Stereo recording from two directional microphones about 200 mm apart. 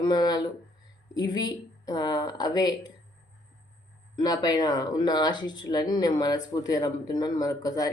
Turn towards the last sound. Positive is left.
turn(degrees=20)  # may be behind; listen again after turning